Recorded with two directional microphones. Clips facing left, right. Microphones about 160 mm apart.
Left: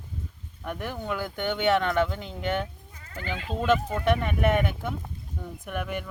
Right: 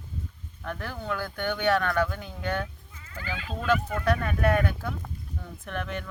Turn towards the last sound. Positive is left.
turn(degrees=10)  # may be behind; listen again after turning